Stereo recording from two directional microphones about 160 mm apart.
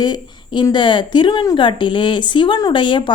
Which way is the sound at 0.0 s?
25° left (ahead or behind).